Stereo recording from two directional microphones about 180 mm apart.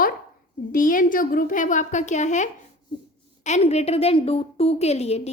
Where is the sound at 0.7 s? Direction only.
50° left (ahead or behind).